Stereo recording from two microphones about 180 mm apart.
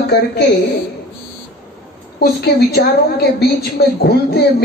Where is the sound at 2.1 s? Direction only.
65° left (ahead or behind).